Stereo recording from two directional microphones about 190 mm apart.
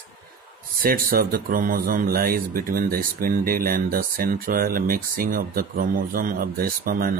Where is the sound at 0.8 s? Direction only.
50° right (ahead or behind).